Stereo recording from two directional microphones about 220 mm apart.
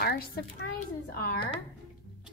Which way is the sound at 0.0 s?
45° left (ahead or behind).